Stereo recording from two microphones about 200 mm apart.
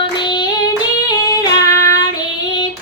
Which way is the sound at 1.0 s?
20° left (ahead or behind).